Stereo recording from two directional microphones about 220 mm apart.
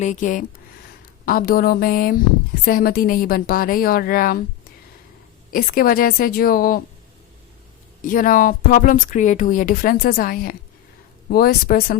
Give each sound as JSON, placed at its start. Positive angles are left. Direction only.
{"t": 0.0, "sound": "speech", "side_deg": 35}
{"t": 5.5, "sound": "speech", "side_deg": 40}
{"t": 8.0, "sound": "speech", "side_deg": 40}